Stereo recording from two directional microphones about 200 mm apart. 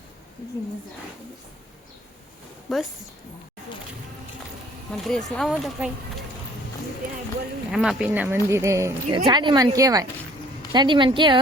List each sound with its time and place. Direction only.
2.7 s speech: centre (ahead or behind)
4.9 s speech: centre (ahead or behind)
7.7 s a woman's voice: centre (ahead or behind); by 11.3 s 25° right (ahead or behind)